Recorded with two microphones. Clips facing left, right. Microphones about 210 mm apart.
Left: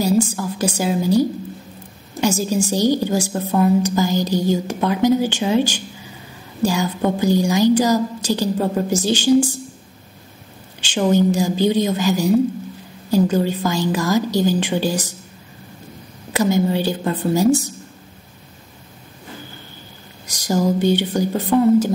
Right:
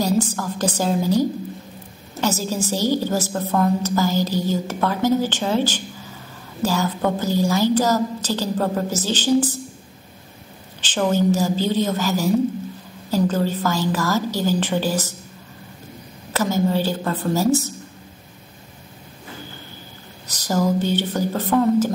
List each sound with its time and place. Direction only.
0.0 s a woman's voice: 10° left (ahead or behind)
10.8 s a woman's voice: 15° left (ahead or behind)
16.3 s a woman's voice: 15° left (ahead or behind)
20.2 s a woman's voice: 15° left (ahead or behind)